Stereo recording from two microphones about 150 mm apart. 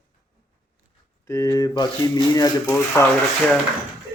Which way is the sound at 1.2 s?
20° left (ahead or behind).